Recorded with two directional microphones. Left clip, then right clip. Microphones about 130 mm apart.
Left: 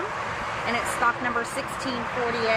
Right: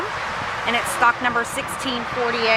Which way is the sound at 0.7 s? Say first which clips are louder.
Right 6 dB; 25° right (ahead or behind).